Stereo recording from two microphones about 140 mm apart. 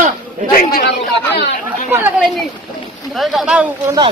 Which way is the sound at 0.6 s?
90° left.